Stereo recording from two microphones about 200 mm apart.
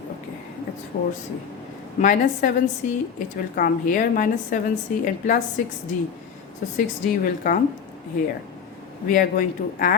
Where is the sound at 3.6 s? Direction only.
45° left (ahead or behind).